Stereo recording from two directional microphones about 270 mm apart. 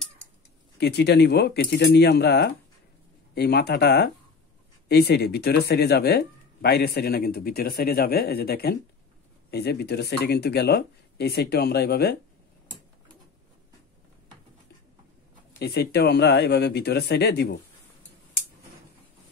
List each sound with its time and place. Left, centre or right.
0.7 s speech: left
15.6 s speech: left